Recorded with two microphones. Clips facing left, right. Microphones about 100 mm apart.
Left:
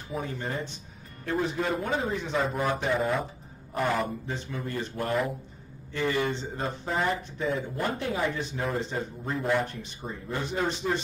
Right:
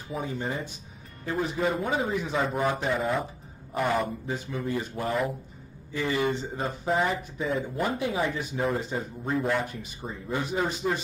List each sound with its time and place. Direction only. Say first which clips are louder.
0.1 s speech: right 1 dB; 5° right (ahead or behind)